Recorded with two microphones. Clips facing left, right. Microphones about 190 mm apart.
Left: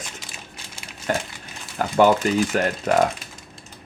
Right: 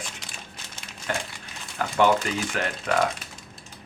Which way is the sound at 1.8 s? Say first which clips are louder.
Left 4 dB; 40° left (ahead or behind).